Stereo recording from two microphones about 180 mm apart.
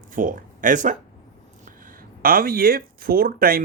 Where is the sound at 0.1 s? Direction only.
50° right (ahead or behind).